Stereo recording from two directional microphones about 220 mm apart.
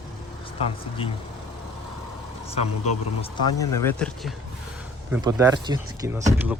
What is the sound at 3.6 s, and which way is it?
Speech, 10° left (ahead or behind).